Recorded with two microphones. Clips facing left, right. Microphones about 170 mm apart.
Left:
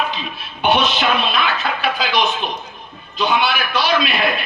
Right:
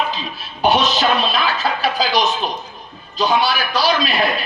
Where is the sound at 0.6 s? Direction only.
40° right (ahead or behind).